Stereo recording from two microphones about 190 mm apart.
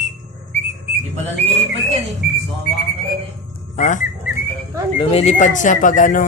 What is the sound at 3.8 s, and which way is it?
Speech, 40° left (ahead or behind).